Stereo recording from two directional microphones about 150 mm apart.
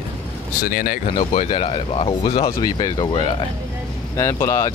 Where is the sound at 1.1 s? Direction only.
35° left (ahead or behind).